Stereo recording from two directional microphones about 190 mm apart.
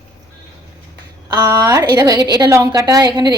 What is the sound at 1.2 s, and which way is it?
A woman's voice, 20° right (ahead or behind).